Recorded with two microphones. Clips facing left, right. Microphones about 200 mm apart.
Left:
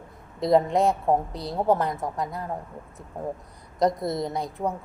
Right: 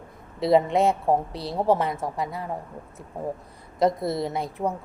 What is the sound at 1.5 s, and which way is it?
Speech, centre (ahead or behind).